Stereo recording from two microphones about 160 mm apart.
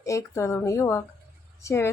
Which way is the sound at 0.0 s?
20° left (ahead or behind).